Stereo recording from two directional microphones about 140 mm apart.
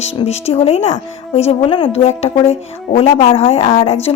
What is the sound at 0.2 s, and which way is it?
A woman's voice, 45° left (ahead or behind).